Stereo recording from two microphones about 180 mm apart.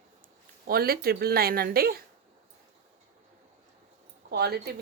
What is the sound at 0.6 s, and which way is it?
Speech, 55° right (ahead or behind).